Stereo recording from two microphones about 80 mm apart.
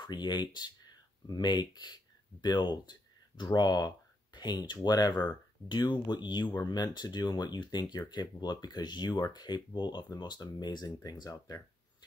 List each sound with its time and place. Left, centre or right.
0.0 s speech: left
6.5 s speech: left